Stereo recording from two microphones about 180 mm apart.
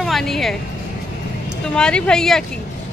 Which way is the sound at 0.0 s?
Centre (ahead or behind).